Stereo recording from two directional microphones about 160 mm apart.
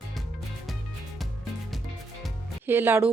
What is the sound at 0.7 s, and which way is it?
Music, centre (ahead or behind).